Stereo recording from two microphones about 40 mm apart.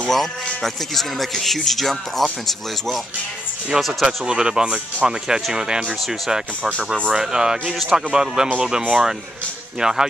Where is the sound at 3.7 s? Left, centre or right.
Centre.